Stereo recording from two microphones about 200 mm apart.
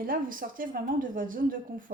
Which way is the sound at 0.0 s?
45° right (ahead or behind).